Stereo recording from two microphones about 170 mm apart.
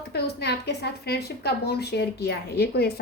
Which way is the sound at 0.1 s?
70° left (ahead or behind).